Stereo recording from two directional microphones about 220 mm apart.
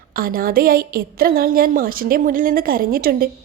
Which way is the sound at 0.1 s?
40° right (ahead or behind).